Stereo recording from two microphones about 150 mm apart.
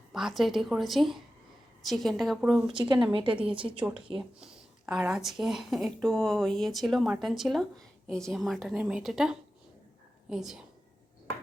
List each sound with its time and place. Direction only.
0.1 s speech: centre (ahead or behind)
3.1 s speech: 35° right (ahead or behind)
3.8 s a woman's voice: 10° right (ahead or behind)